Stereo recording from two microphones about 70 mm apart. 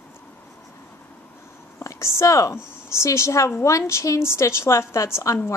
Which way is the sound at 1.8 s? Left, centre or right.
Left.